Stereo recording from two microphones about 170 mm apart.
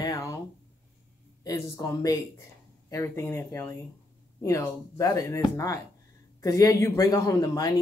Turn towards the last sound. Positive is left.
turn(degrees=20)  # may be behind; listen again after turning